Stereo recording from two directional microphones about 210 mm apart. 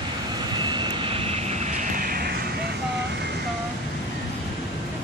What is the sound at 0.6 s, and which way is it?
Vehicle, 20° right (ahead or behind).